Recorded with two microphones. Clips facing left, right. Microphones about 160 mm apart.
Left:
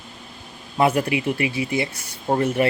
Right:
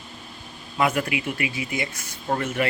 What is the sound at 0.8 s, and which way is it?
Speech, 35° left (ahead or behind).